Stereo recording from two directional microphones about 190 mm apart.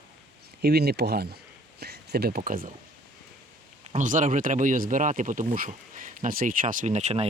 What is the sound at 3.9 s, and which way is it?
Speech, 45° right (ahead or behind).